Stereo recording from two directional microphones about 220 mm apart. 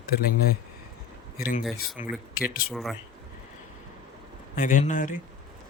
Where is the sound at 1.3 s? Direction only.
45° left (ahead or behind).